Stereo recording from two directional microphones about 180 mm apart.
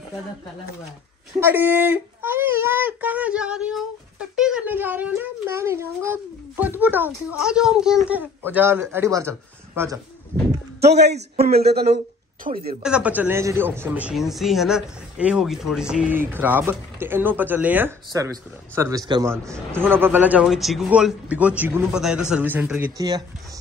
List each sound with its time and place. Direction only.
1.4 s speech: 10° right (ahead or behind)
10.8 s speech: 65° right (ahead or behind)
12.5 s speech: 30° right (ahead or behind)
12.8 s speech: 5° right (ahead or behind); by 19.2 s 20° right (ahead or behind)
19.7 s speech: 10° right (ahead or behind)
22.9 s speech: 20° right (ahead or behind)